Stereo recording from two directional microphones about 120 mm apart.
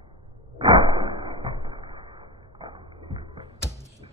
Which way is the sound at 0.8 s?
40° right (ahead or behind).